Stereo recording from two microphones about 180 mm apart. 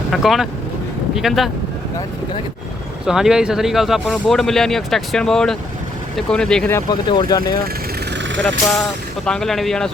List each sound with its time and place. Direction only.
0.1 s speech: centre (ahead or behind)
3.1 s speech: 5° right (ahead or behind); by 7.6 s 25° left (ahead or behind)
8.1 s vehicle: 90° right
9.2 s speech: 5° left (ahead or behind)